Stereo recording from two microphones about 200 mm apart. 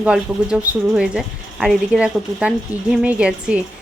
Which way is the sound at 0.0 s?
5° right (ahead or behind).